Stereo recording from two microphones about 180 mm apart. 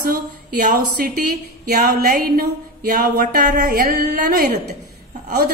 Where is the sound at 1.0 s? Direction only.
55° right (ahead or behind).